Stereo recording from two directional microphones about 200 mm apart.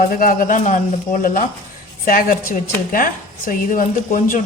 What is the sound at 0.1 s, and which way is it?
A woman's voice, 45° left (ahead or behind).